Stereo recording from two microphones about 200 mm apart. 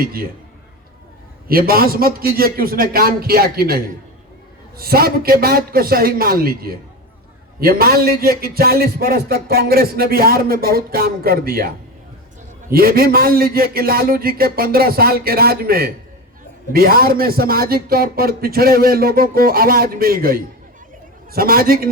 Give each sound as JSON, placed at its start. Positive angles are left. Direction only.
{"t": 0.0, "sound": "a man's voice", "side_deg": -50}
{"t": 1.5, "sound": "a man's voice", "side_deg": -50}
{"t": 4.8, "sound": "a man's voice", "side_deg": -50}
{"t": 12.7, "sound": "a man's voice", "side_deg": -50}